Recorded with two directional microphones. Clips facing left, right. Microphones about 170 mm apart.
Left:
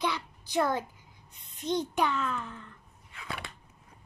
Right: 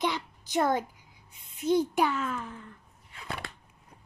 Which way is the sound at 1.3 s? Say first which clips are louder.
Right 5 dB; 5° right (ahead or behind).